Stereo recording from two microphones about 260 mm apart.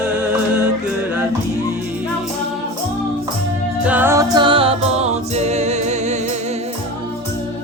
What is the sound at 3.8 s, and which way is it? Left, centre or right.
Music, centre.